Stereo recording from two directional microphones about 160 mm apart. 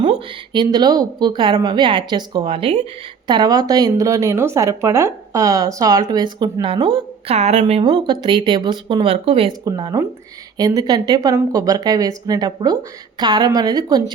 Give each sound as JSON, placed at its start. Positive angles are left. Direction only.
{"t": 0.0, "sound": "a woman's voice", "side_deg": -30}
{"t": 9.5, "sound": "a woman's voice", "side_deg": -25}